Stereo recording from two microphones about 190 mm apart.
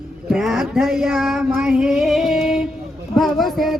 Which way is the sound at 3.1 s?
Centre (ahead or behind).